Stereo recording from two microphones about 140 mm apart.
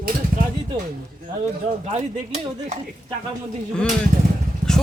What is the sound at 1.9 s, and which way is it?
Speech, 60° right (ahead or behind).